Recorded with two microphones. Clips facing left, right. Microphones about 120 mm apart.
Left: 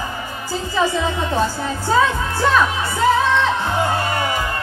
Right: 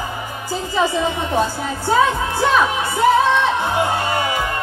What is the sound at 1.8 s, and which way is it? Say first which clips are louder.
Speech: right 1 dB; 15° right (ahead or behind).